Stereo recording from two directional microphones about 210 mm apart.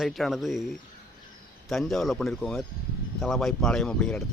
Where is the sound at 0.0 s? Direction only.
Centre (ahead or behind).